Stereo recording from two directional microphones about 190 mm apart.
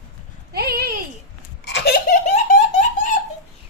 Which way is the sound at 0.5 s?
55° right (ahead or behind).